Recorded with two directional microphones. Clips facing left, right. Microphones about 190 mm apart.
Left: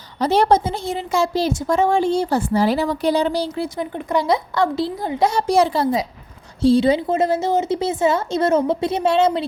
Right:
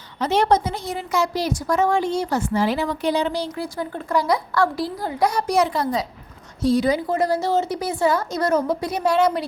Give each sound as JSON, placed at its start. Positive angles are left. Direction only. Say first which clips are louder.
{"t": 0.2, "sound": "a woman's voice", "louder": "left 3 dB", "side_deg": 35}